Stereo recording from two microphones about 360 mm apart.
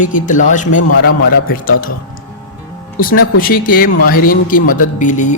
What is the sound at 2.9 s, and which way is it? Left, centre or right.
A man's voice, left.